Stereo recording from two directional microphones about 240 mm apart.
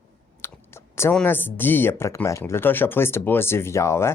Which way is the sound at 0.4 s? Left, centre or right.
Centre.